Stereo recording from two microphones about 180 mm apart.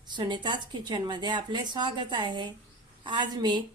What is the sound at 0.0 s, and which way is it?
Speech, 25° right (ahead or behind).